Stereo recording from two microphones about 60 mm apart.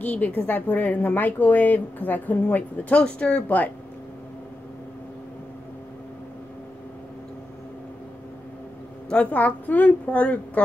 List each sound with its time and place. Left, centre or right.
0.0 s a woman's voice: left
9.1 s a woman's voice: left